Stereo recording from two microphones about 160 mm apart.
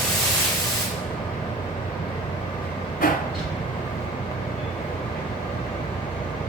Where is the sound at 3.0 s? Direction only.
60° left (ahead or behind).